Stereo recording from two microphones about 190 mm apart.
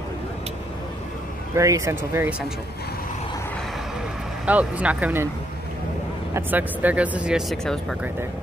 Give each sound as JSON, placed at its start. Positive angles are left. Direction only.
{"t": 1.5, "sound": "speech", "side_deg": -15}
{"t": 4.5, "sound": "speech", "side_deg": -5}
{"t": 6.3, "sound": "speech", "side_deg": -10}